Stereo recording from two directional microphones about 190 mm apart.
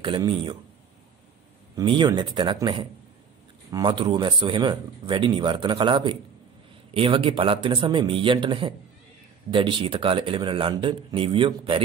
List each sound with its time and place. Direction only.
0.0 s speech: 25° right (ahead or behind)
1.8 s speech: 25° right (ahead or behind)